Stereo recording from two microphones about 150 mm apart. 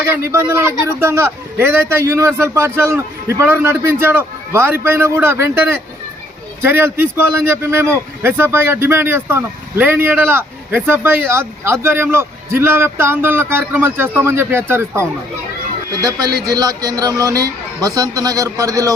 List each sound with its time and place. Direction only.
0.0 s speech: 15° right (ahead or behind)